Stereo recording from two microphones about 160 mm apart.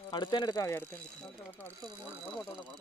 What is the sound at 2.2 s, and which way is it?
Speech, centre (ahead or behind).